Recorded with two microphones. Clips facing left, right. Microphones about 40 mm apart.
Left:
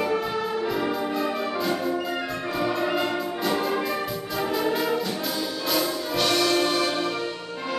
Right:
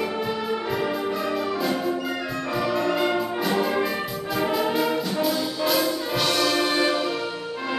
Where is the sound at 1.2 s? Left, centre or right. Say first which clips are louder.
Right 1 dB; centre.